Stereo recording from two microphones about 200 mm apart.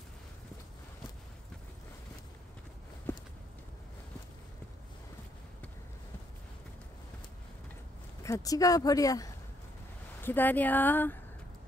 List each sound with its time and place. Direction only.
3.1 s walk: 10° left (ahead or behind)
8.2 s speech: 15° left (ahead or behind)